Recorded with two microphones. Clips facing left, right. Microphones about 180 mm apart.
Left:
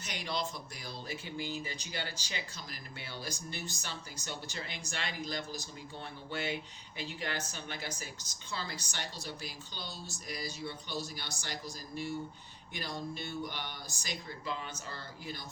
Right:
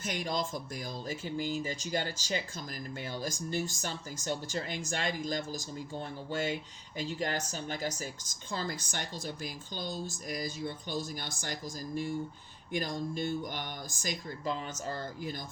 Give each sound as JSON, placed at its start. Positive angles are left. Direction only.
{"t": 0.0, "sound": "speech", "side_deg": -45}